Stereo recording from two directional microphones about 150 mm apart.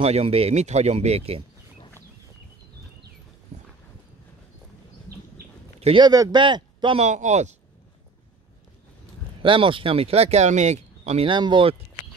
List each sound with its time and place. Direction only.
0.0 s speech: 40° right (ahead or behind)
5.8 s a sound: 40° right (ahead or behind)
6.0 s speech: 25° right (ahead or behind)
7.0 s speech: 50° right (ahead or behind)
9.4 s speech: 35° right (ahead or behind)
11.2 s speech: 30° right (ahead or behind)